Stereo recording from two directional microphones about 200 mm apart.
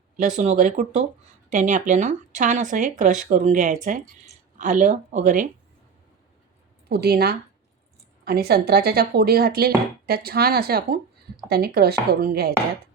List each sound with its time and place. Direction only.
0.3 s speech: 40° right (ahead or behind)
6.8 s speech: 50° right (ahead or behind)